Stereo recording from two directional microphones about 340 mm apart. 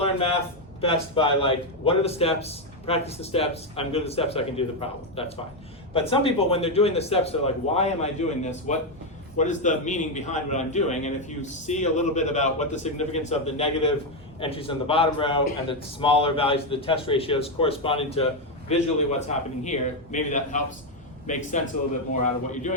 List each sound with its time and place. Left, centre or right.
0.8 s a man's voice: centre